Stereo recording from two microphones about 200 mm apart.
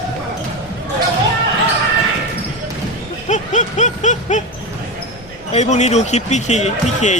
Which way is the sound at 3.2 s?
35° left (ahead or behind).